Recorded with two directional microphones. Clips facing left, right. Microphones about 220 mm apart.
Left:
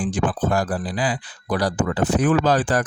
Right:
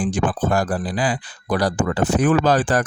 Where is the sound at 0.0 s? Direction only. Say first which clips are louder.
Right 1 dB; 50° right (ahead or behind).